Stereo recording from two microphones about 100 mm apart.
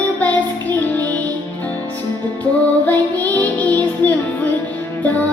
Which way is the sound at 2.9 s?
15° left (ahead or behind).